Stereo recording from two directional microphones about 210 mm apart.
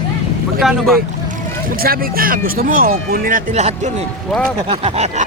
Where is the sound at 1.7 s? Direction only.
45° right (ahead or behind).